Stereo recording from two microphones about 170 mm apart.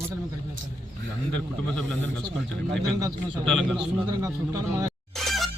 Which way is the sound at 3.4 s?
5° left (ahead or behind).